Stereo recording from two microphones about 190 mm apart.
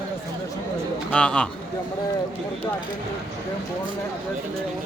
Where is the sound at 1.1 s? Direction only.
5° left (ahead or behind).